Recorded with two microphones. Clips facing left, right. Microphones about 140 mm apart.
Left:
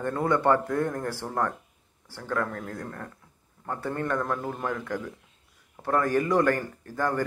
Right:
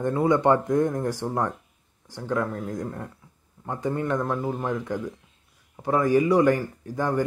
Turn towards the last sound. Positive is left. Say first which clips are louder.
# right 2 dB
turn(degrees=-10)  # may be behind; listen again after turning